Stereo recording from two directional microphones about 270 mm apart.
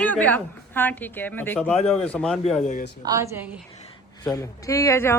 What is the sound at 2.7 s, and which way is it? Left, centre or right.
Speech, left.